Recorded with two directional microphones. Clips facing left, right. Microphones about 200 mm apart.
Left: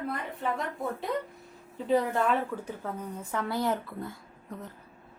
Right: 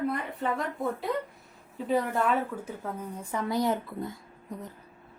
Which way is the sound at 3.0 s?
15° right (ahead or behind).